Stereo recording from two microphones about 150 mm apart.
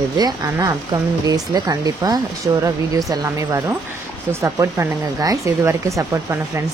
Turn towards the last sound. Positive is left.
turn(degrees=-20)  # may be behind; listen again after turning